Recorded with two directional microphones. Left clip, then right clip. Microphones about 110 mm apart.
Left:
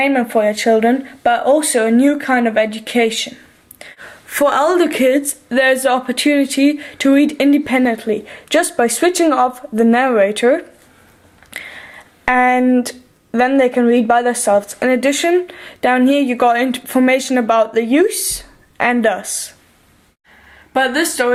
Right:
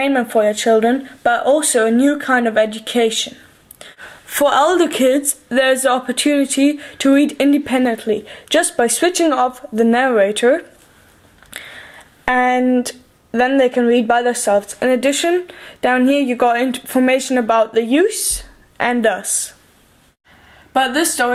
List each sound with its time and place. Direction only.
0.0 s speech: 30° right (ahead or behind)
4.0 s speech: 15° right (ahead or behind)
20.7 s speech: 40° right (ahead or behind)